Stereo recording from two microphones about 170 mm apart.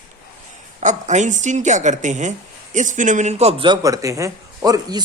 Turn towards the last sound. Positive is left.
turn(degrees=-20)  # may be behind; listen again after turning